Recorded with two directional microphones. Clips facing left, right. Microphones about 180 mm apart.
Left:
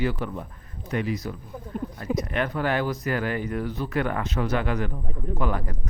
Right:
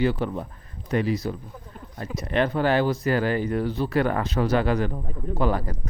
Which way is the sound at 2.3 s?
30° right (ahead or behind).